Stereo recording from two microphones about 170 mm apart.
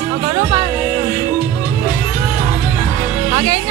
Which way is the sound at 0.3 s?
25° right (ahead or behind).